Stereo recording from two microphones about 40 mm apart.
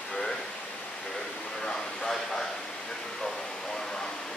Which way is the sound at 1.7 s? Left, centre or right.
Centre.